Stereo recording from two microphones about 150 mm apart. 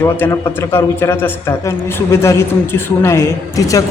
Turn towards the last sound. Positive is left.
turn(degrees=20)  # may be behind; listen again after turning